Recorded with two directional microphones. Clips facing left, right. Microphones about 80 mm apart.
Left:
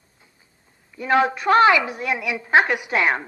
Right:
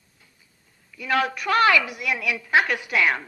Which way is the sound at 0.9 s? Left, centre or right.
Left.